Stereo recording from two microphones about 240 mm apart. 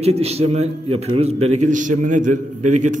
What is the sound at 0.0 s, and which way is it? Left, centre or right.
A man's voice, right.